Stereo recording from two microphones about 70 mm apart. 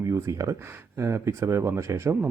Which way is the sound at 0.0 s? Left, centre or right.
Right.